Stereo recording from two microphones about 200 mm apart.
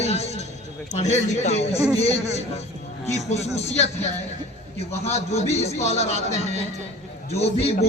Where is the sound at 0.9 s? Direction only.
35° left (ahead or behind).